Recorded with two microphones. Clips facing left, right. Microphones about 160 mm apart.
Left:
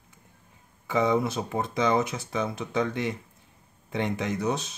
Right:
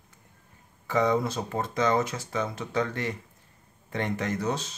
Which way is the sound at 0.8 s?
15° left (ahead or behind).